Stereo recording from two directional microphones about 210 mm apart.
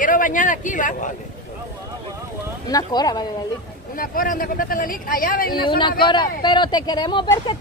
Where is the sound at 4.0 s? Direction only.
40° left (ahead or behind).